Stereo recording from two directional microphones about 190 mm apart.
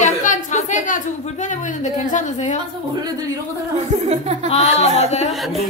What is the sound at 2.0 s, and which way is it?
Speech, 40° left (ahead or behind).